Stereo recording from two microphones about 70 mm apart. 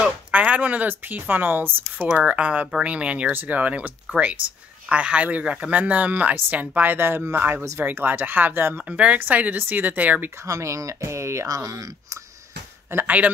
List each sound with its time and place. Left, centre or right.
0.0 s speech: centre
8.8 s speech: centre
10.4 s speech: right
12.9 s speech: right